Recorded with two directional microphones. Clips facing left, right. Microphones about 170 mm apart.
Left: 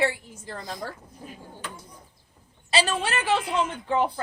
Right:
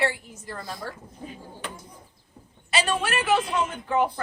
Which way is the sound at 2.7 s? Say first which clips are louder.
Even; 30° left (ahead or behind).